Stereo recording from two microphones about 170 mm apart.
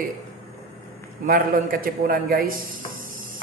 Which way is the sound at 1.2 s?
55° right (ahead or behind).